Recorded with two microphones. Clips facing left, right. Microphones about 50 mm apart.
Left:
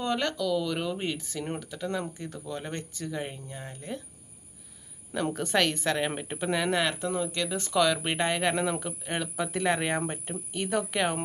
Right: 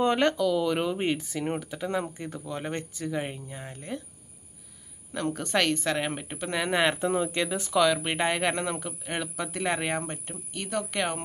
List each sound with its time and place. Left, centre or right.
0.0 s speech: right
0.4 s speech: centre
5.1 s speech: centre
6.7 s speech: right
7.5 s speech: centre